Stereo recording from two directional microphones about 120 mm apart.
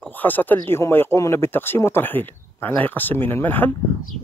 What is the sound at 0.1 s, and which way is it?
Speech, 15° left (ahead or behind).